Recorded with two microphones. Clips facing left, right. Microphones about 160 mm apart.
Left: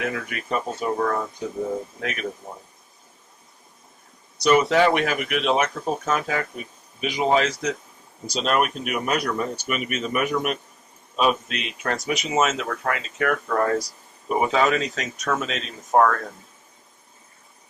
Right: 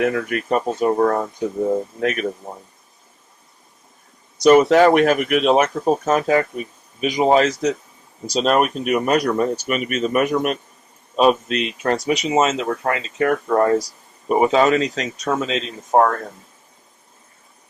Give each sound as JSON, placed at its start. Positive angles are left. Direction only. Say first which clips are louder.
{"t": 0.0, "sound": "speech", "louder": "right 8 dB", "side_deg": -45}
{"t": 0.9, "sound": "speech", "louder": "right 6 dB", "side_deg": -40}
{"t": 4.4, "sound": "speech", "louder": "right 6 dB", "side_deg": -45}
{"t": 14.3, "sound": "speech", "louder": "right 6 dB", "side_deg": -45}
{"t": 14.5, "sound": "speech", "louder": "right 5 dB", "side_deg": -30}